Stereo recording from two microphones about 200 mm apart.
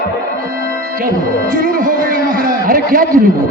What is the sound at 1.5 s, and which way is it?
A man's voice, 45° right (ahead or behind).